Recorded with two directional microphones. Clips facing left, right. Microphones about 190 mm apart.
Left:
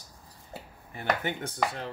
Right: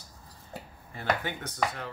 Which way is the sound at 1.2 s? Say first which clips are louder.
Left 3 dB; 25° left (ahead or behind).